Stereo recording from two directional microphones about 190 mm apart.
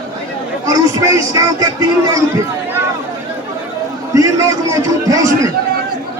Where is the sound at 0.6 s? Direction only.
15° right (ahead or behind).